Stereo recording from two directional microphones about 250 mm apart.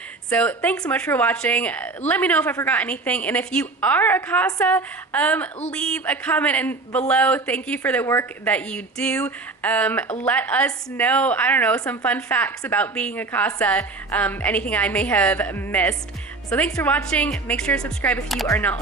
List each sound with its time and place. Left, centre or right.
0.3 s a woman's voice: centre